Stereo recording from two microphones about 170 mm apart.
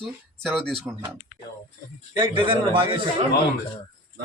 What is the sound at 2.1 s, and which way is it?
Speech, 30° right (ahead or behind).